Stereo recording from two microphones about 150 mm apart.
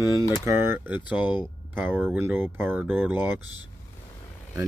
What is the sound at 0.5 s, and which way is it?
Speech, 15° right (ahead or behind).